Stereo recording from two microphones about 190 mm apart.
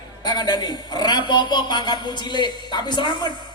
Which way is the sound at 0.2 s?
20° left (ahead or behind).